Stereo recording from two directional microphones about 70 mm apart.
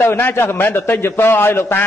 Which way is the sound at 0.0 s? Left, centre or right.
Left.